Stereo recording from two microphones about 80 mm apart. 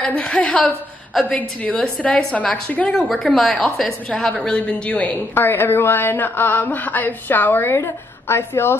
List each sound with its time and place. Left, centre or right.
0.0 s a woman's voice: centre
2.9 s a woman's voice: centre
4.3 s a woman's voice: centre
5.3 s speech: left